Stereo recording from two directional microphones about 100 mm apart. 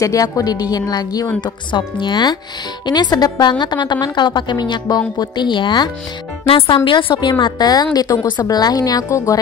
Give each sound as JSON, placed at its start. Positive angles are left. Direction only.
{"t": 0.0, "sound": "a woman's voice", "side_deg": 35}
{"t": 6.4, "sound": "a woman's voice", "side_deg": 60}